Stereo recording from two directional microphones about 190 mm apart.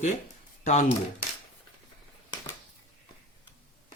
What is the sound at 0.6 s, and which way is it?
Speech, 40° left (ahead or behind).